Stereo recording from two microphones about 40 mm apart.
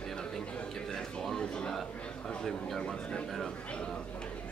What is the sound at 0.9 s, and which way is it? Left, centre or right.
Speech, centre.